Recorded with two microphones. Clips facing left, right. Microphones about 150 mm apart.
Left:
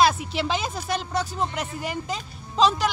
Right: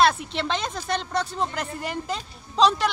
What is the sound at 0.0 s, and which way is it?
Speech, 5° left (ahead or behind).